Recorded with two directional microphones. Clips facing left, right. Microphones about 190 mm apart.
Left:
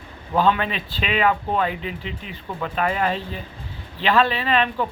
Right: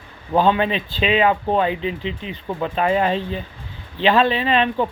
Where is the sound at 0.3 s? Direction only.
30° right (ahead or behind).